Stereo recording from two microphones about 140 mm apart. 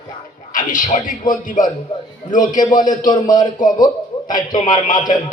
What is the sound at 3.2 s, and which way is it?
Speech, 30° left (ahead or behind).